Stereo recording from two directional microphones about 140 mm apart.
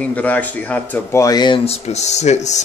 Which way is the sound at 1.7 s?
50° left (ahead or behind).